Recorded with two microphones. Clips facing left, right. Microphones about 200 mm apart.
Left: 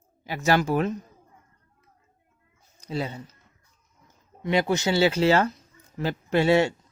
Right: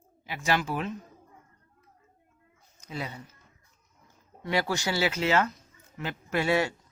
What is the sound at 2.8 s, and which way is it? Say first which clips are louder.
Speech: left 6 dB; 30° left (ahead or behind).